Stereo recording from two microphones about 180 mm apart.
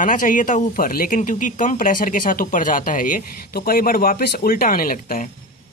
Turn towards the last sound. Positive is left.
turn(degrees=50)  # may be behind; listen again after turning